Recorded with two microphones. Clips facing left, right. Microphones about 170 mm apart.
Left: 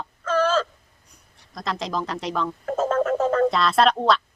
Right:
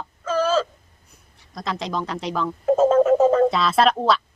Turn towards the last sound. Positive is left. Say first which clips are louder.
# right 1 dB
turn(degrees=0)  # may be behind; listen again after turning